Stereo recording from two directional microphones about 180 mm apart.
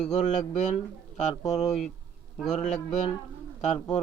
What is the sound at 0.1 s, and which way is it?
Speech, 40° left (ahead or behind).